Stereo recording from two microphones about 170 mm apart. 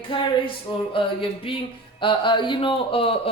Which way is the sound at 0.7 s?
25° left (ahead or behind).